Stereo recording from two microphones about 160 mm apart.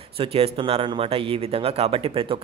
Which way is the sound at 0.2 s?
35° right (ahead or behind).